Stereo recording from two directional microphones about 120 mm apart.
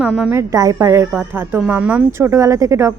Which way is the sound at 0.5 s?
30° right (ahead or behind).